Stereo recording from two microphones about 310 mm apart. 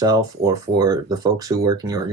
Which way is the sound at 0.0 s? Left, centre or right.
Centre.